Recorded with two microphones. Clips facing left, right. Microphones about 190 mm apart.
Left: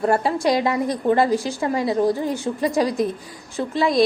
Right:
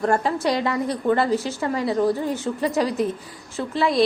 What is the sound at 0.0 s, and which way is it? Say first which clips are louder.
A woman's voice: left 2 dB; 10° left (ahead or behind).